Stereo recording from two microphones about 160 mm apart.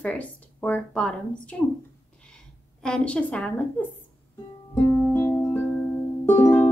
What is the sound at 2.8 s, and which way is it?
A woman's voice, 5° left (ahead or behind).